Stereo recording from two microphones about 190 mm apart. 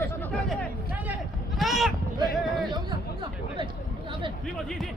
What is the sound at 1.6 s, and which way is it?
Sheep, centre (ahead or behind).